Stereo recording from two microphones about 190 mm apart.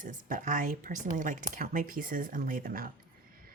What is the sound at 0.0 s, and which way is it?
Speech, 45° right (ahead or behind).